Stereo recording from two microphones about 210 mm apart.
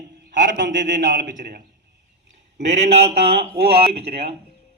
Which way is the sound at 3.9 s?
30° right (ahead or behind).